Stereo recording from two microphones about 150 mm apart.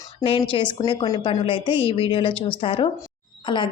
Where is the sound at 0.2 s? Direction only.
35° left (ahead or behind).